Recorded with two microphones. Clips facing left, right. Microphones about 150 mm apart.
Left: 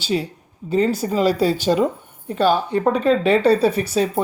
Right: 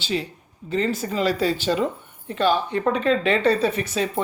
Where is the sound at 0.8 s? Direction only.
40° left (ahead or behind).